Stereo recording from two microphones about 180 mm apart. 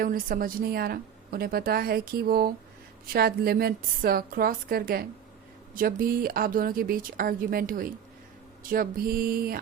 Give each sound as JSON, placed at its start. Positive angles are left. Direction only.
{"t": 0.0, "sound": "a woman's voice", "side_deg": -50}